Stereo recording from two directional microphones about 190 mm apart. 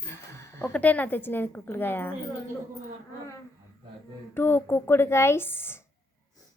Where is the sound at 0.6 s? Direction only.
10° left (ahead or behind).